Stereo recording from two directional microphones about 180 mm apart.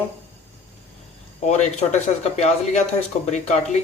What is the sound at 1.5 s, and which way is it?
Speech, 40° left (ahead or behind).